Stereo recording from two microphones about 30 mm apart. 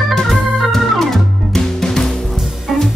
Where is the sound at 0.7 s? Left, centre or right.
Centre.